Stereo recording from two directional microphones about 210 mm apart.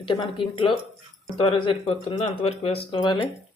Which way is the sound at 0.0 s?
25° left (ahead or behind).